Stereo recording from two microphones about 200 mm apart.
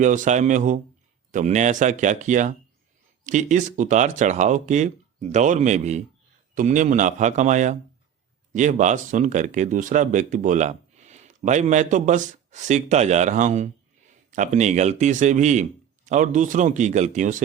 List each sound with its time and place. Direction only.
0.0 s speech: 40° right (ahead or behind)